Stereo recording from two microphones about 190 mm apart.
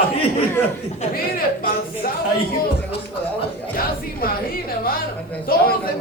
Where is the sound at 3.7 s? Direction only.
50° left (ahead or behind).